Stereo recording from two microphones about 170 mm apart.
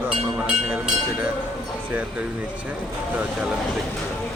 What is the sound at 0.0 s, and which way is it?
Vehicle, 10° right (ahead or behind).